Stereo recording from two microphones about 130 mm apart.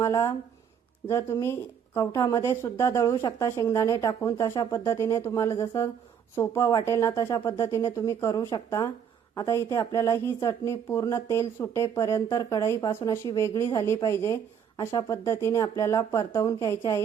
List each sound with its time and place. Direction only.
0.0 s speech: 25° left (ahead or behind)